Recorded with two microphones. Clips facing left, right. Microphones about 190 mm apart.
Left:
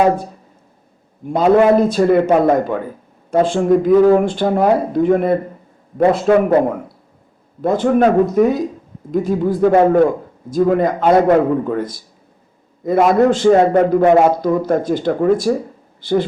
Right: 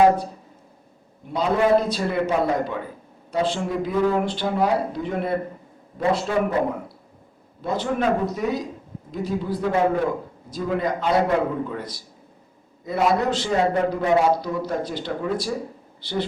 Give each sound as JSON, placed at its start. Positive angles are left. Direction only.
{"t": 1.3, "sound": "a man's voice", "side_deg": 55}
{"t": 7.6, "sound": "a man's voice", "side_deg": 50}